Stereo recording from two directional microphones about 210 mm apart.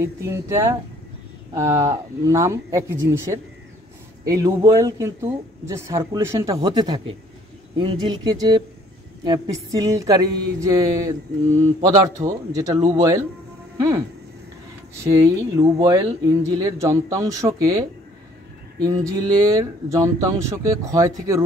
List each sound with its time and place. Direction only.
0.0 s speech: 15° right (ahead or behind)
4.2 s speech: 15° right (ahead or behind)
15.8 s speech: 15° right (ahead or behind)
18.8 s speech: 15° right (ahead or behind)